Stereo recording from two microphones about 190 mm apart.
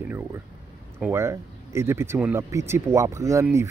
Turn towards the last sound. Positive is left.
turn(degrees=-15)  # may be behind; listen again after turning